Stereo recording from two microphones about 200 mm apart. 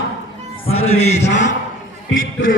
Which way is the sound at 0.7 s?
30° left (ahead or behind).